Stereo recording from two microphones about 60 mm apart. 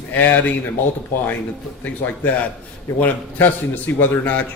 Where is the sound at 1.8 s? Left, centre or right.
Left.